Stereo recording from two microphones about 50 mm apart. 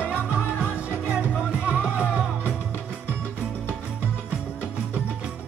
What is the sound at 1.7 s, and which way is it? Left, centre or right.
Music, right.